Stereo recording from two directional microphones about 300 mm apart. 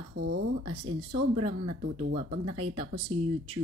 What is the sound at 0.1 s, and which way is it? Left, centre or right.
Speech, right.